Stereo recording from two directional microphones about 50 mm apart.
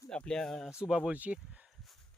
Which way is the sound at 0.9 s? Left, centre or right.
Centre.